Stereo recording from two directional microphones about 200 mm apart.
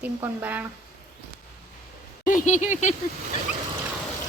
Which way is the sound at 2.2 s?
40° left (ahead or behind).